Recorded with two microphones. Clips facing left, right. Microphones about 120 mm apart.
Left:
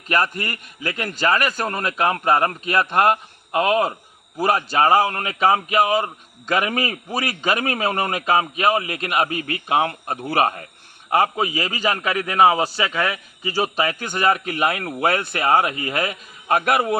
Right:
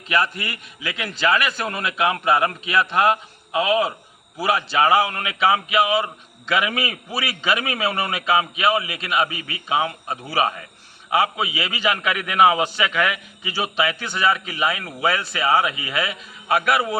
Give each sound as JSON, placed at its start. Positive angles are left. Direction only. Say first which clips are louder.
{"t": 0.1, "sound": "a man's voice", "louder": "left 1 dB", "side_deg": 45}